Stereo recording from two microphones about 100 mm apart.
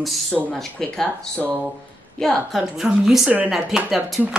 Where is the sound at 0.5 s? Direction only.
5° left (ahead or behind).